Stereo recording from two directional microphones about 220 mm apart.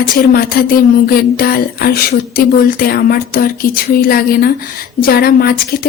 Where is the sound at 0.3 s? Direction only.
45° left (ahead or behind).